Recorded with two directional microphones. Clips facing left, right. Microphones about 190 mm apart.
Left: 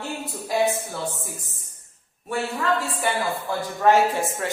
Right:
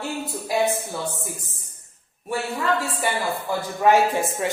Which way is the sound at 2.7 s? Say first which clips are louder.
Even; centre (ahead or behind).